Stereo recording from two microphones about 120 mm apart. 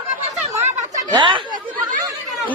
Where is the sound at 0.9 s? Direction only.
40° right (ahead or behind).